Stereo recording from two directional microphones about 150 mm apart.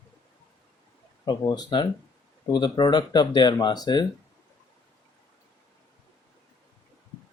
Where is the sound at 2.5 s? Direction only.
30° left (ahead or behind).